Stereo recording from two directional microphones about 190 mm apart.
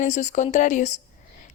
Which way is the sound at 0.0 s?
40° left (ahead or behind).